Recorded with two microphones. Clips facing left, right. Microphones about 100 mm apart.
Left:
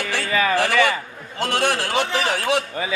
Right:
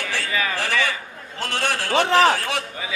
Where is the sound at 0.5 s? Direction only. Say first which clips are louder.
Left 6 dB; 15° left (ahead or behind).